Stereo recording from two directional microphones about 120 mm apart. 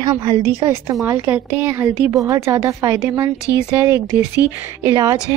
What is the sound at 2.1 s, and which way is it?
A woman's voice, 25° right (ahead or behind).